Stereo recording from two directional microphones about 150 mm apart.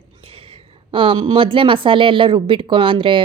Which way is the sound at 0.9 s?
35° right (ahead or behind).